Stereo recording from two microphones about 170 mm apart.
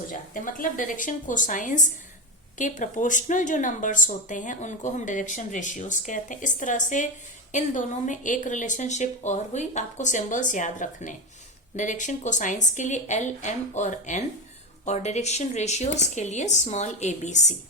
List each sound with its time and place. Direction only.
0.1 s speech: 50° left (ahead or behind)